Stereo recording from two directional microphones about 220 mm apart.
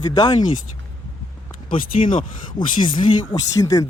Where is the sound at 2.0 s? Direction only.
25° left (ahead or behind).